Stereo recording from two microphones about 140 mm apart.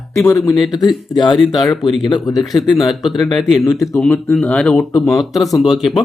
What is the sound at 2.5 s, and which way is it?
Speech, centre (ahead or behind).